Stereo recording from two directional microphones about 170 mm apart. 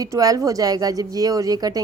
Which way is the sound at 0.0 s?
20° right (ahead or behind).